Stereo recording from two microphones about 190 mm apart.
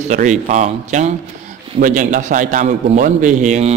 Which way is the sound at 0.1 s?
40° right (ahead or behind).